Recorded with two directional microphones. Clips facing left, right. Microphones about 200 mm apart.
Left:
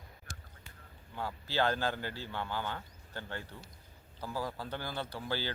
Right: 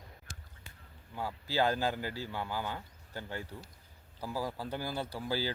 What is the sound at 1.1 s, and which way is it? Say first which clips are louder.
Speech: right 1 dB; 10° right (ahead or behind).